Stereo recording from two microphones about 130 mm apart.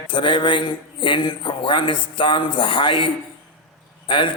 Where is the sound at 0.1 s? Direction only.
40° left (ahead or behind).